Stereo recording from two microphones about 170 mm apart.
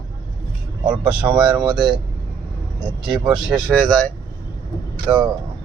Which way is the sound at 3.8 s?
5° left (ahead or behind).